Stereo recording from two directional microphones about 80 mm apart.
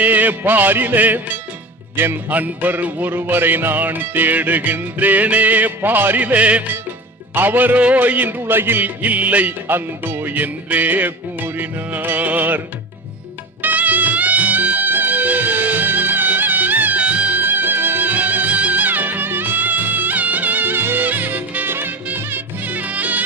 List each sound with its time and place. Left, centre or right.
0.0 s music: right